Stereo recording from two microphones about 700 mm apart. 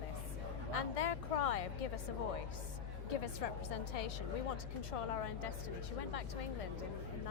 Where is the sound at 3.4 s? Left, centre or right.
Left.